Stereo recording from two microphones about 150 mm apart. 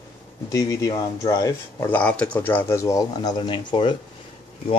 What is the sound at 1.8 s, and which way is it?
Speech, 10° left (ahead or behind).